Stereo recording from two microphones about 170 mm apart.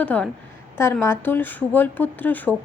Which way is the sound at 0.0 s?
10° left (ahead or behind).